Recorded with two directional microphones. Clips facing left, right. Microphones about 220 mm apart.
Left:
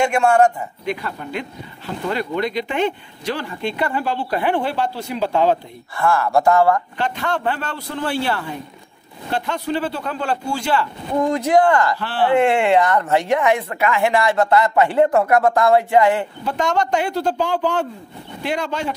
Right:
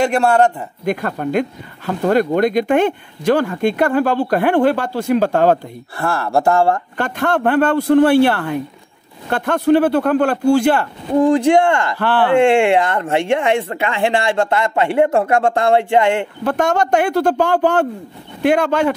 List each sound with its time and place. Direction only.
0.0 s a man's voice: 35° right (ahead or behind)
1.0 s speech: 55° right (ahead or behind)
5.9 s speech: 30° right (ahead or behind)
7.0 s a man's voice: 50° right (ahead or behind)
11.1 s speech: 30° right (ahead or behind)
12.0 s a man's voice: 55° right (ahead or behind)
12.4 s speech: 30° right (ahead or behind)
16.4 s a man's voice: 55° right (ahead or behind)